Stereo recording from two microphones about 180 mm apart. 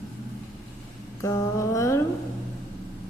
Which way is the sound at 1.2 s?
15° left (ahead or behind).